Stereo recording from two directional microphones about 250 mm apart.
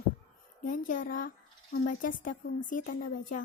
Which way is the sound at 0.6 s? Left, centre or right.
Left.